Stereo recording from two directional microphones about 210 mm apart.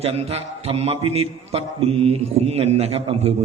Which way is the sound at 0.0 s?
30° right (ahead or behind).